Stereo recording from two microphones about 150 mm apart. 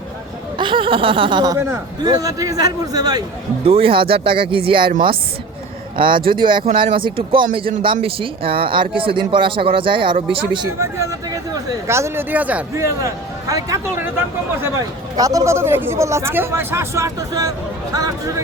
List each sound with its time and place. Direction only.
0.6 s speech: 35° right (ahead or behind)
1.5 s speech: 20° right (ahead or behind)
3.7 s speech: 40° right (ahead or behind)
6.0 s speech: 35° right (ahead or behind)
10.7 s speech: 20° right (ahead or behind)
15.1 s speech: 25° right (ahead or behind)